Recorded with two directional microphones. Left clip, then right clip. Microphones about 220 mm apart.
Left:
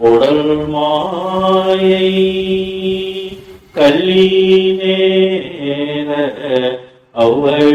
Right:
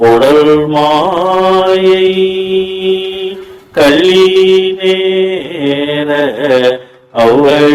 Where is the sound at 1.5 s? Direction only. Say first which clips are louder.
Right 1 dB; 20° right (ahead or behind).